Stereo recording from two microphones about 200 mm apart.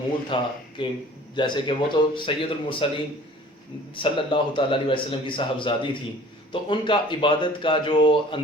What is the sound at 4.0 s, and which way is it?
Speech, 25° left (ahead or behind).